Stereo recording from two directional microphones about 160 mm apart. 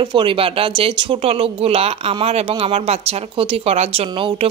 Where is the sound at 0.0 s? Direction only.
30° right (ahead or behind).